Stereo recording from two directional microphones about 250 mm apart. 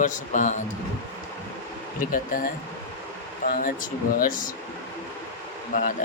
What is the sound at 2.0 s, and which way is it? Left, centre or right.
Speech, left.